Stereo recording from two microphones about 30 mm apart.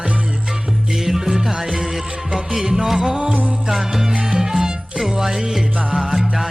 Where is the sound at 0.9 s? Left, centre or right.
Centre.